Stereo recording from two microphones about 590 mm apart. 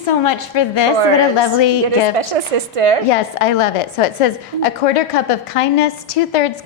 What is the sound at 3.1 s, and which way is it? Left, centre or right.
A woman's voice, left.